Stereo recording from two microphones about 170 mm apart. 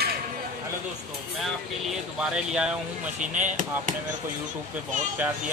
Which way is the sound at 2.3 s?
5° right (ahead or behind).